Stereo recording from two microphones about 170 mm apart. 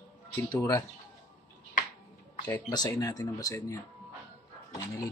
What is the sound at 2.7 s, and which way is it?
Speech, 20° left (ahead or behind).